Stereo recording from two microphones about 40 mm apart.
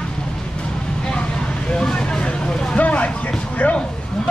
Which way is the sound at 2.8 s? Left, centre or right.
Left.